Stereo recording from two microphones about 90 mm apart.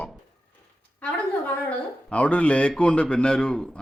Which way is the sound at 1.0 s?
15° left (ahead or behind).